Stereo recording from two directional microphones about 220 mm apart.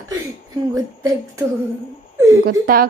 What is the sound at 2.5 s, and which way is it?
Speech, 40° right (ahead or behind).